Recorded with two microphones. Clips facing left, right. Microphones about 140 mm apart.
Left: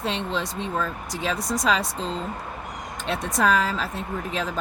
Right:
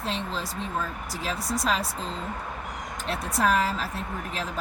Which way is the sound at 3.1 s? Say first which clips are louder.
Left 3 dB; 90° left.